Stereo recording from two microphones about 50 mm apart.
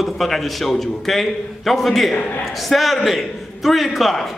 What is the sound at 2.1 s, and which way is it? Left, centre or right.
Speech, left.